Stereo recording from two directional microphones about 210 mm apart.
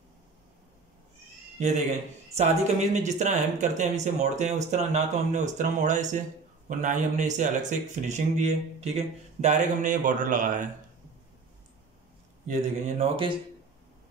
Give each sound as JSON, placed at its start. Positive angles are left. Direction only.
{"t": 1.6, "sound": "speech", "side_deg": -35}
{"t": 12.4, "sound": "speech", "side_deg": -30}